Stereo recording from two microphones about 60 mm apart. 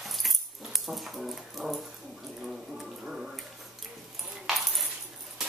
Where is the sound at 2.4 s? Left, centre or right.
Centre.